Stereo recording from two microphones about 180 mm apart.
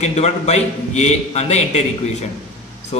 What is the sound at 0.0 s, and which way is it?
A man's voice, 35° left (ahead or behind).